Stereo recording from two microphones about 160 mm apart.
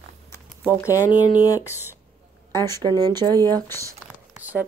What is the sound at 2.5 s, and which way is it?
Speech, 15° left (ahead or behind).